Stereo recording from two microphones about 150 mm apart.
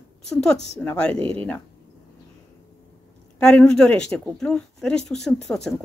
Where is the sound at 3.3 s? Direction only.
5° left (ahead or behind).